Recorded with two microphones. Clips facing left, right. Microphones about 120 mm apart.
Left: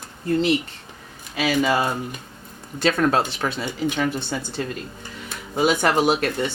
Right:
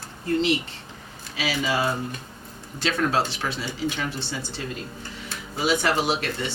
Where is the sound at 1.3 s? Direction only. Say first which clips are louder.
Left 5 dB; 50° left (ahead or behind).